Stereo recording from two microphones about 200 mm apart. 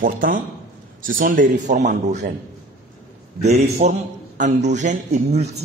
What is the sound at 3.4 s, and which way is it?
A man's voice, 35° right (ahead or behind).